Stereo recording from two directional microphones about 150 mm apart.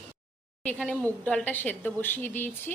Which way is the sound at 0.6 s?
5° left (ahead or behind).